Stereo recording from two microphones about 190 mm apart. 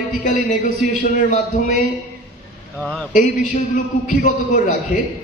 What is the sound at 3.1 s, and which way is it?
A man's voice, 45° left (ahead or behind).